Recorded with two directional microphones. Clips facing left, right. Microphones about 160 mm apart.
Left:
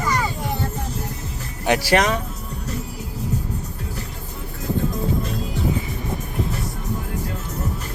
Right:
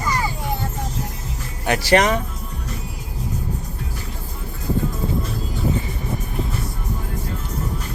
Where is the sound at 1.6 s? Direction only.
15° left (ahead or behind).